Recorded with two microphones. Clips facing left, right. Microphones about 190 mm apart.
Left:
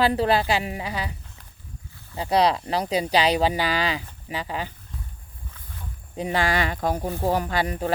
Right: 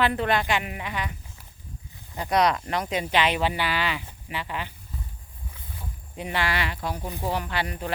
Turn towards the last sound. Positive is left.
turn(degrees=40)  # may be behind; listen again after turning